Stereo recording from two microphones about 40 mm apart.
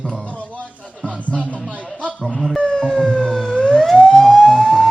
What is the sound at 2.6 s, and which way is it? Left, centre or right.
Siren, centre.